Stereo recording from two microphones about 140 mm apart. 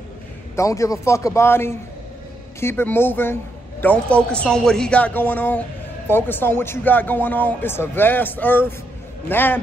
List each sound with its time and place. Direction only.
0.6 s a man's voice: 20° left (ahead or behind)